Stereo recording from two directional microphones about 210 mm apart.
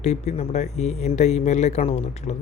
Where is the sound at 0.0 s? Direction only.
35° left (ahead or behind).